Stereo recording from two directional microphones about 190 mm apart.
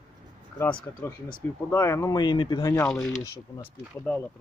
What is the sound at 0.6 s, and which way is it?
Speech, 10° left (ahead or behind).